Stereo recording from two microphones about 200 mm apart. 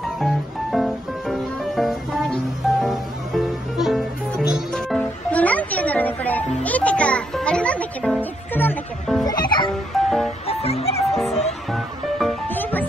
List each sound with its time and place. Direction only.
0.2 s music: centre (ahead or behind)
9.2 s music: 20° left (ahead or behind)
9.9 s music: centre (ahead or behind)
10.4 s music: 30° left (ahead or behind)
11.1 s music: centre (ahead or behind)